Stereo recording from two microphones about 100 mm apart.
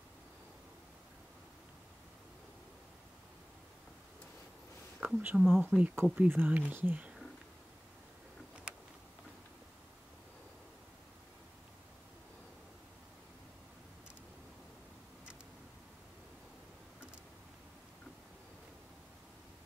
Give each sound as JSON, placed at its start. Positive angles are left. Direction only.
{"t": 5.0, "sound": "speech", "side_deg": -15}